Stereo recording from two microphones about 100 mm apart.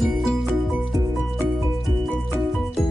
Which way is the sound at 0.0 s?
Centre (ahead or behind).